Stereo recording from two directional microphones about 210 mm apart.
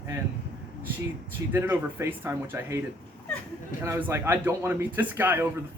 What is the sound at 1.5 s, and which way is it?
Speech, 10° right (ahead or behind).